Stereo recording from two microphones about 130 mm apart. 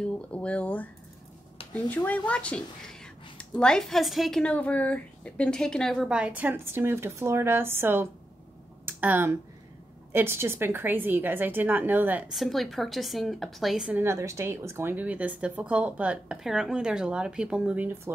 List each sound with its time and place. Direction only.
0.0 s speech: 10° left (ahead or behind); by 12.3 s 15° right (ahead or behind)
12.3 s speech: centre (ahead or behind)
14.0 s speech: 25° right (ahead or behind)